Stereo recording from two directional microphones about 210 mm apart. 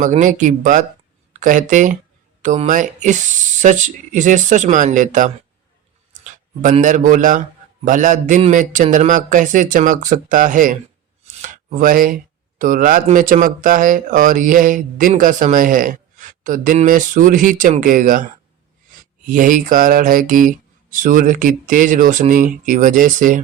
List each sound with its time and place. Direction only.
0.0 s speech: 35° right (ahead or behind)
19.3 s speech: 40° right (ahead or behind)